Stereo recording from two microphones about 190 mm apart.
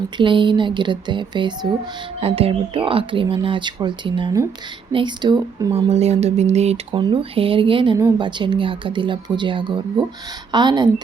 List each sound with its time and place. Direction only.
0.2 s speech: 25° right (ahead or behind)
5.7 s speech: 35° right (ahead or behind)